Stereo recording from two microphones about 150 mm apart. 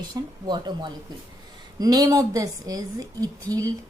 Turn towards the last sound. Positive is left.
turn(degrees=-25)  # may be behind; listen again after turning